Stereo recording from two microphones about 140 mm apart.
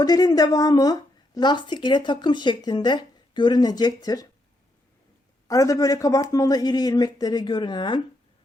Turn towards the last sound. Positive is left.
turn(degrees=35)  # may be behind; listen again after turning